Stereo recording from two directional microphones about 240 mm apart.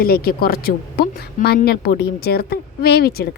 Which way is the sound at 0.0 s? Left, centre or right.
Left.